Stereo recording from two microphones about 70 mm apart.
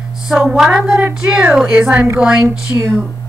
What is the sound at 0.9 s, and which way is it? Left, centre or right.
Speech, right.